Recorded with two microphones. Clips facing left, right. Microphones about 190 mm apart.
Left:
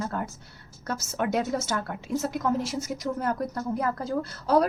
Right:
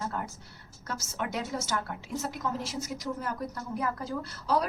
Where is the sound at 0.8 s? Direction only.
50° left (ahead or behind).